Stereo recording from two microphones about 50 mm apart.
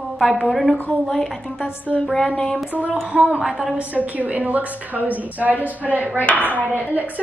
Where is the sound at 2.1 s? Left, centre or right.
Centre.